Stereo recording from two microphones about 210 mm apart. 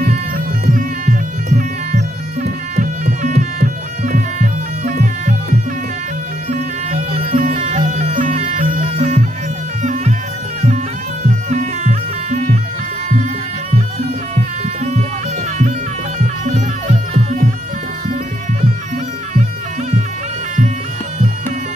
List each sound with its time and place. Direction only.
0.7 s music: 35° right (ahead or behind)
6.5 s music: 35° right (ahead or behind)
11.2 s music: 35° right (ahead or behind)
16.2 s music: 35° right (ahead or behind)